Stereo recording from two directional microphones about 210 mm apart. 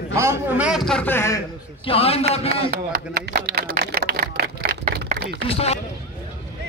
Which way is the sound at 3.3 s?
50° right (ahead or behind).